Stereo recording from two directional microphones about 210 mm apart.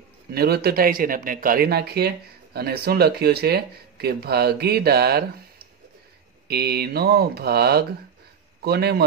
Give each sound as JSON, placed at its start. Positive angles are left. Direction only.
{"t": 0.3, "sound": "a man's voice", "side_deg": -50}
{"t": 6.4, "sound": "a man's voice", "side_deg": -50}